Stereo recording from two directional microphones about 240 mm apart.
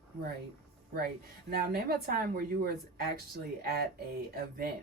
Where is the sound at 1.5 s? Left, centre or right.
Right.